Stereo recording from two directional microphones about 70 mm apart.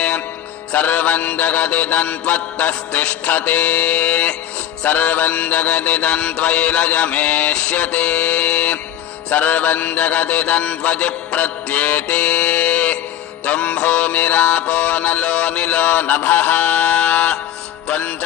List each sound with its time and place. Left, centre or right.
0.7 s music: left